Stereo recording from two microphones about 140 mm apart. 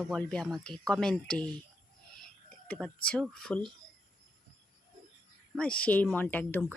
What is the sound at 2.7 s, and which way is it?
Speech, 5° left (ahead or behind).